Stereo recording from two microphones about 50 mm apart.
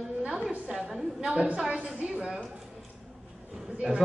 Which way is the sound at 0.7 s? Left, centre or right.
Centre.